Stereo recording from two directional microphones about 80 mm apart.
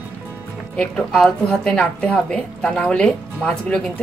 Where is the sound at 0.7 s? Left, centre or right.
Centre.